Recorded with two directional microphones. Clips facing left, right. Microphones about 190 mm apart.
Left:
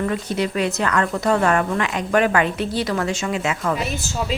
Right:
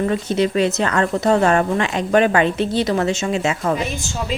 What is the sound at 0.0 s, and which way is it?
Speech, 25° right (ahead or behind).